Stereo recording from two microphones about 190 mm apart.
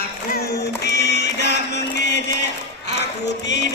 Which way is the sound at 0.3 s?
60° left (ahead or behind).